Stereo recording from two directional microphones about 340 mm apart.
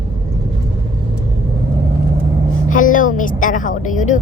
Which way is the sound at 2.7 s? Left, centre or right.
Left.